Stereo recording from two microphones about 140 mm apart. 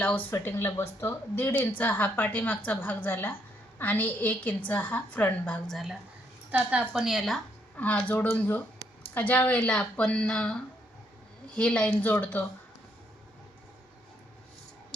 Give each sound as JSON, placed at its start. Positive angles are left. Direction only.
{"t": 0.0, "sound": "a woman's voice", "side_deg": 10}